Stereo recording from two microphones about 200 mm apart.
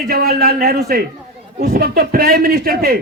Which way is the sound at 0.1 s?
50° right (ahead or behind).